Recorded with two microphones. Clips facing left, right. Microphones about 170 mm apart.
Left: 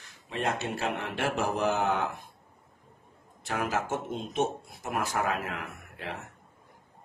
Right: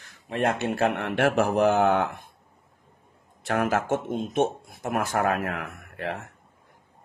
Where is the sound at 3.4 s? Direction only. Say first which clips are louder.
Right 6 dB; 60° right (ahead or behind).